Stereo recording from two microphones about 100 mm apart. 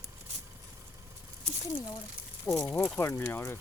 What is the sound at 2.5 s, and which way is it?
Speech, 20° left (ahead or behind).